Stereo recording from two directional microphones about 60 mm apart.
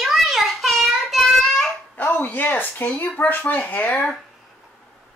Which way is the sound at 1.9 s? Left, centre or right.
Left.